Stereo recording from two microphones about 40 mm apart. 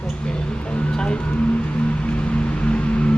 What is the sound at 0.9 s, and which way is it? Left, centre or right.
Speech, centre.